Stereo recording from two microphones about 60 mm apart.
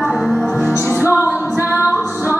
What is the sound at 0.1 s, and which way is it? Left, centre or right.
Music, centre.